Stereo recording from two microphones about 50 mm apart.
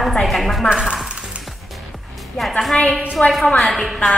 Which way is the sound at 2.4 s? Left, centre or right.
Centre.